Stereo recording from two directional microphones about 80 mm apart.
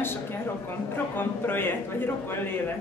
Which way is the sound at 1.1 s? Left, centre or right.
Left.